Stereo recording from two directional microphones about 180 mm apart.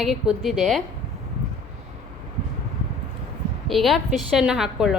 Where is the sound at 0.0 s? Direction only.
Centre (ahead or behind).